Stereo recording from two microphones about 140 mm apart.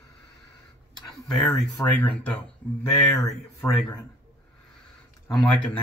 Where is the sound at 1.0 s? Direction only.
Centre (ahead or behind).